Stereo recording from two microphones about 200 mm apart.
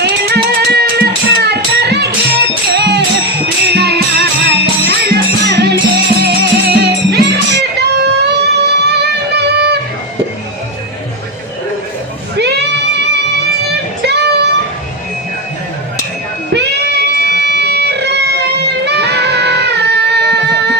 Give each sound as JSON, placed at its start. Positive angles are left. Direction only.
{"t": 0.0, "sound": "music", "side_deg": -55}
{"t": 12.4, "sound": "music", "side_deg": -55}
{"t": 16.6, "sound": "music", "side_deg": -55}